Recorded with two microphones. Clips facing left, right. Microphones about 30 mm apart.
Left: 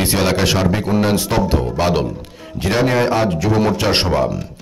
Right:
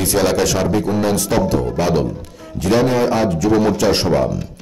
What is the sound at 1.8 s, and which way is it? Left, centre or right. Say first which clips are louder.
A man's voice: even; left.